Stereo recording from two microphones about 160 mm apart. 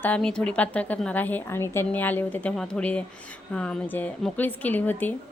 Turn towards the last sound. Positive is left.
turn(degrees=10)  # may be behind; listen again after turning